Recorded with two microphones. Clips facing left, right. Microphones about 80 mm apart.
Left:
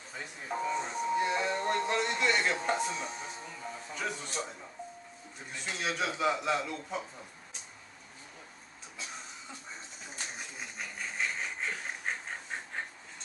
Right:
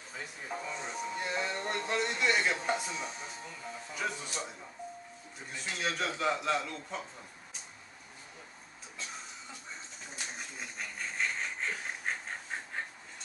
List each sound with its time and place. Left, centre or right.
0.1 s doorbell: centre
3.9 s a man's voice: centre
10.3 s a sound: centre